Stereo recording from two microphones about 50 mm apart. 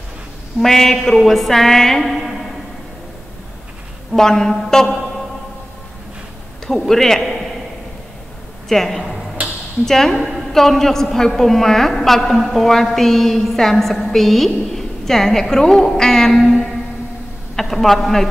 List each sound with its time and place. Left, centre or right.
0.6 s a woman's voice: centre
4.1 s music: centre
6.7 s a man's voice: centre
8.6 s speech: centre
9.4 s a sound: right
9.8 s music: centre
10.2 s a woman's voice: centre